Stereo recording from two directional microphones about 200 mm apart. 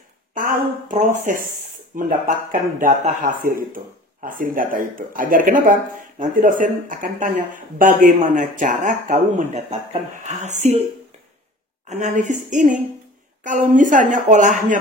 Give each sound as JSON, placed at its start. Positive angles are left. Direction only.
{"t": 0.3, "sound": "a sound", "side_deg": -45}
{"t": 2.0, "sound": "a man's voice", "side_deg": -45}
{"t": 11.9, "sound": "a man's voice", "side_deg": -40}